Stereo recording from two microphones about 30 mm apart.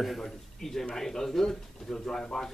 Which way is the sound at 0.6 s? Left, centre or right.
Centre.